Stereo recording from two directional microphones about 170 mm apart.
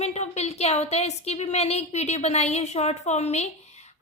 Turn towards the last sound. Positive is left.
turn(degrees=40)  # may be behind; listen again after turning